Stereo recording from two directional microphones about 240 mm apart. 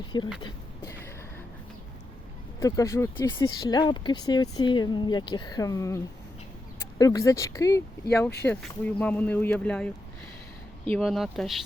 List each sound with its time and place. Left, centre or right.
0.4 s a sound: centre
2.6 s speech: centre
7.0 s speech: centre